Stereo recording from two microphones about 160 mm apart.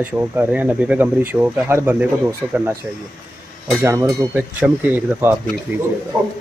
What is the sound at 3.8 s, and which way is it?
Speech, 15° right (ahead or behind).